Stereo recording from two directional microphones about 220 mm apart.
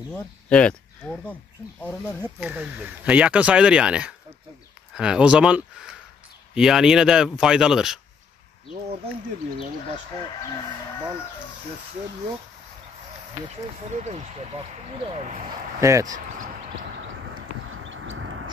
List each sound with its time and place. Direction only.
0.1 s speech: 5° left (ahead or behind)
2.0 s speech: 5° right (ahead or behind)
13.8 s speech: 30° right (ahead or behind)
15.8 s speech: 15° right (ahead or behind)
17.8 s vehicle: 65° right (ahead or behind)